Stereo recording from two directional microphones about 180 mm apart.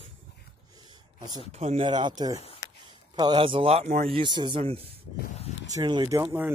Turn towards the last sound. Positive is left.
turn(degrees=-20)  # may be behind; listen again after turning